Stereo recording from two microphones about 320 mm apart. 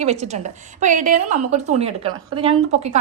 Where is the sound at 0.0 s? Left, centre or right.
Right.